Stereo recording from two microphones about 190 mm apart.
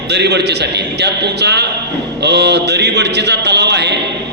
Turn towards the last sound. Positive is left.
turn(degrees=-65)  # may be behind; listen again after turning